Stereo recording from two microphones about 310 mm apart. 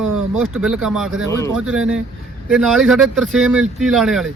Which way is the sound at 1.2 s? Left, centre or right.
Centre.